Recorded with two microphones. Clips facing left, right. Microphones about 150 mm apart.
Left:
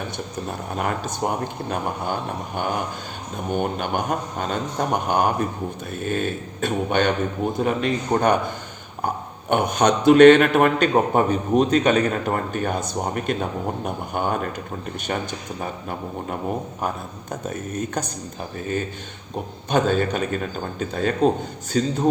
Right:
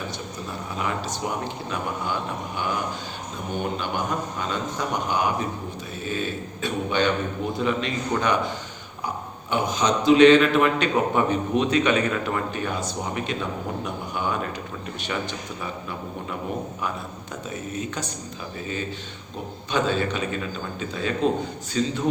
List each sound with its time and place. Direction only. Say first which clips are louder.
0.4 s a man's voice: left 3 dB; 50° left (ahead or behind)
15.6 s a man's voice: left 4 dB; 50° left (ahead or behind)
17.5 s a man's voice: left 3 dB; 45° left (ahead or behind)
19.7 s a man's voice: left 4 dB; 45° left (ahead or behind)